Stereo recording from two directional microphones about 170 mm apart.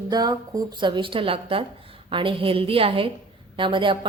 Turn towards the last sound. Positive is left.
turn(degrees=-30)  # may be behind; listen again after turning